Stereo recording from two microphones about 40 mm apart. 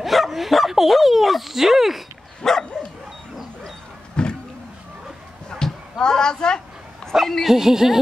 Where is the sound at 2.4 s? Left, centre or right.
Centre.